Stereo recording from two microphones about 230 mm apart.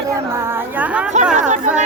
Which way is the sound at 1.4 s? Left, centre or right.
Right.